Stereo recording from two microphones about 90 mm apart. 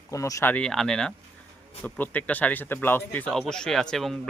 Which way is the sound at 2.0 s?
20° left (ahead or behind).